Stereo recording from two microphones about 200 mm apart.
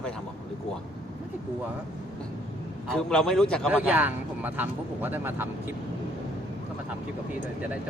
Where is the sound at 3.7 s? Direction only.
10° right (ahead or behind).